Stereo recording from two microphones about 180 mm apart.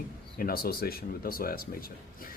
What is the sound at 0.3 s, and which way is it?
A man's voice, 55° left (ahead or behind).